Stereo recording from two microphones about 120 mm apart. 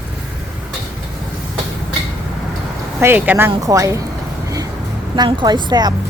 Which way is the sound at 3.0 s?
20° right (ahead or behind).